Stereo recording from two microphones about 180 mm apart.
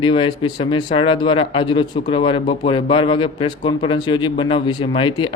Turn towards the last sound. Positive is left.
turn(degrees=25)  # may be behind; listen again after turning